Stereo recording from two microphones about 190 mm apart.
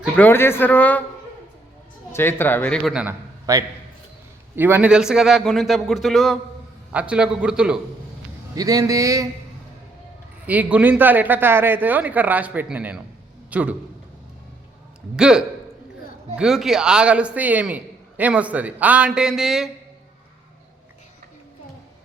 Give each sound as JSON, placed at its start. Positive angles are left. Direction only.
{"t": 0.2, "sound": "speech", "side_deg": 10}
{"t": 2.1, "sound": "speech", "side_deg": 10}
{"t": 2.9, "sound": "a man's voice", "side_deg": -5}
{"t": 3.5, "sound": "a man's voice", "side_deg": -15}
{"t": 8.5, "sound": "a man's voice", "side_deg": -20}
{"t": 10.4, "sound": "a man's voice", "side_deg": -10}
{"t": 15.1, "sound": "a man's voice", "side_deg": -5}